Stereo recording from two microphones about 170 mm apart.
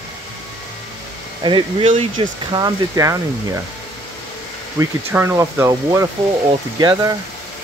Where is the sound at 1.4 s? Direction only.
30° right (ahead or behind).